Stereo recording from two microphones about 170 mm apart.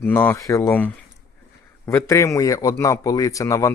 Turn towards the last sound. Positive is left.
turn(degrees=20)  # may be behind; listen again after turning